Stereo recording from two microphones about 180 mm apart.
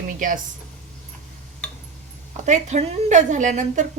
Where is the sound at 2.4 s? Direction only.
40° right (ahead or behind).